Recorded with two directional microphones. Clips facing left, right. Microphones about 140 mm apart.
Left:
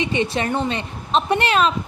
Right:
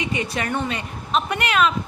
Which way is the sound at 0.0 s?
30° left (ahead or behind).